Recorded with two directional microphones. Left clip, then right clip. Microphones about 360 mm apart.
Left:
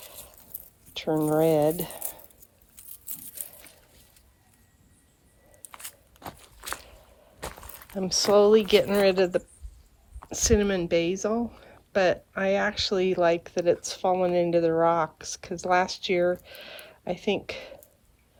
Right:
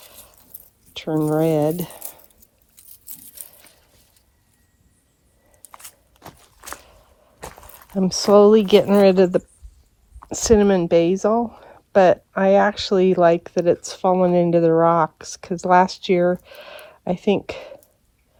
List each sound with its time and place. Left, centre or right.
0.9 s speech: centre
2.7 s a sound: centre
5.7 s walk: centre
8.4 s speech: centre